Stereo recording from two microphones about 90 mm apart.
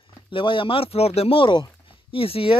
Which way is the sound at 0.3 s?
70° left (ahead or behind).